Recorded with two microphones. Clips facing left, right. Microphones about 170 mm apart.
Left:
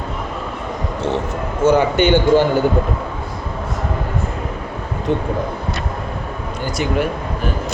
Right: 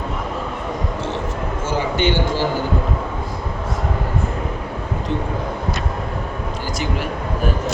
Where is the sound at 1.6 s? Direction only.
60° left (ahead or behind).